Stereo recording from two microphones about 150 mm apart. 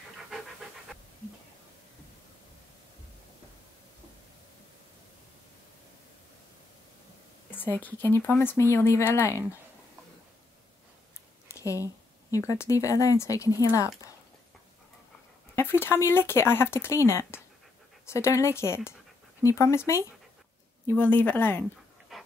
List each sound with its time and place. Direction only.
7.5 s speech: 10° left (ahead or behind)
11.5 s a sound: 20° left (ahead or behind)
12.3 s speech: 20° left (ahead or behind)
15.5 s speech: 15° left (ahead or behind)
22.1 s dog: centre (ahead or behind)